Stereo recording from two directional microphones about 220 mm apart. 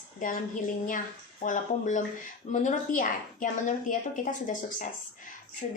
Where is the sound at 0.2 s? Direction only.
40° left (ahead or behind).